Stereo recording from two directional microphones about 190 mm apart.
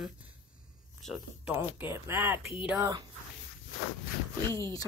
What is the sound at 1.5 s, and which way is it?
Speech, 10° right (ahead or behind).